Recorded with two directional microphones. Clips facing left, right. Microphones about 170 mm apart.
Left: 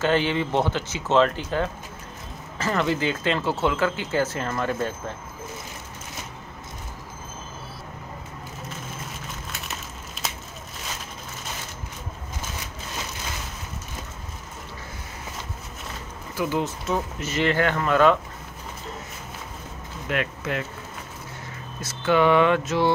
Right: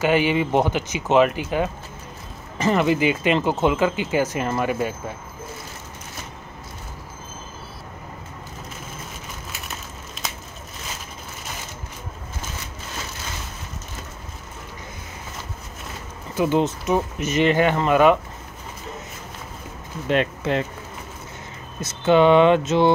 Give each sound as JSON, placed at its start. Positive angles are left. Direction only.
{"t": 0.0, "sound": "speech", "side_deg": -10}
{"t": 16.3, "sound": "speech", "side_deg": -20}
{"t": 20.1, "sound": "speech", "side_deg": -30}
{"t": 21.8, "sound": "speech", "side_deg": -25}